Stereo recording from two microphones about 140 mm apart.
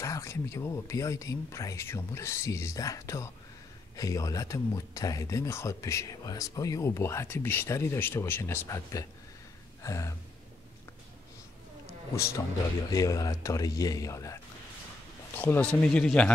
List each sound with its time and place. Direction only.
0.0 s speech: 20° left (ahead or behind)
9.8 s gasp: 20° left (ahead or behind)
12.9 s speech: 25° left (ahead or behind); by 16.3 s 10° left (ahead or behind)